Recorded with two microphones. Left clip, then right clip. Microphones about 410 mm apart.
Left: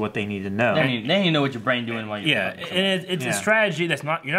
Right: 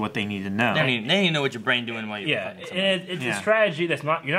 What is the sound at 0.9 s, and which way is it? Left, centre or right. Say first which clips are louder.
Speech: even; left.